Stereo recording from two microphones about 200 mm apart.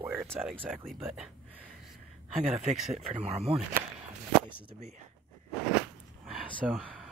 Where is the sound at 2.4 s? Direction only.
35° right (ahead or behind).